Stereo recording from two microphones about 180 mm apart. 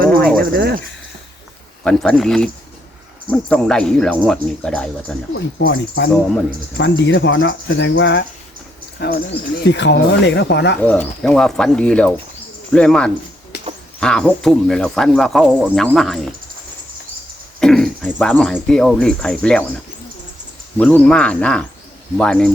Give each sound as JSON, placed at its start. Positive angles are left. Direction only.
{"t": 0.3, "sound": "cricket", "side_deg": -55}
{"t": 1.8, "sound": "speech", "side_deg": 5}
{"t": 5.3, "sound": "speech", "side_deg": 85}
{"t": 9.0, "sound": "speech", "side_deg": 60}
{"t": 10.8, "sound": "speech", "side_deg": 10}
{"t": 17.6, "sound": "speech", "side_deg": 5}
{"t": 20.7, "sound": "speech", "side_deg": 5}